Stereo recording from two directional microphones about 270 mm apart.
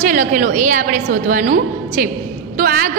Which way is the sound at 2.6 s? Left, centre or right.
Right.